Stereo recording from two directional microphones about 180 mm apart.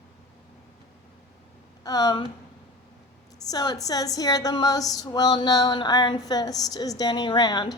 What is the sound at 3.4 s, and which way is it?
Speech, 20° left (ahead or behind).